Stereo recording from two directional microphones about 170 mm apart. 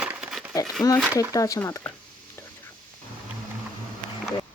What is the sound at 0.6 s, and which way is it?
Speech, centre (ahead or behind).